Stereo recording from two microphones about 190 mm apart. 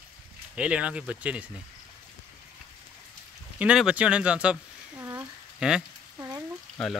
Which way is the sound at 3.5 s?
5° right (ahead or behind).